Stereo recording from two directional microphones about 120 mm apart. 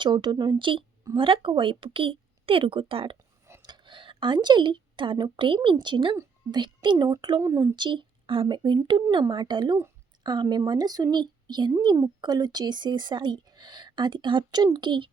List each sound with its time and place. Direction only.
0.0 s a woman's voice: 40° right (ahead or behind)
7.4 s speech: 25° right (ahead or behind)
7.8 s speech: 40° right (ahead or behind)
10.4 s speech: 25° right (ahead or behind); by 15.1 s 40° right (ahead or behind)